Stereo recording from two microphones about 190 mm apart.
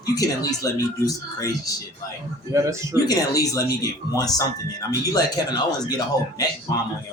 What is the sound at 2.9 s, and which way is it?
A man's voice, 20° left (ahead or behind).